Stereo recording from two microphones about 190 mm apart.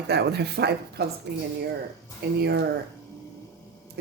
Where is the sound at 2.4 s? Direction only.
55° right (ahead or behind).